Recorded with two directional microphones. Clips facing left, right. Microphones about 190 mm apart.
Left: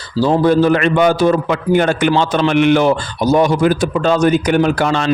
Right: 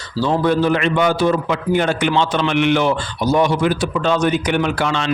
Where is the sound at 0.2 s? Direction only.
35° left (ahead or behind).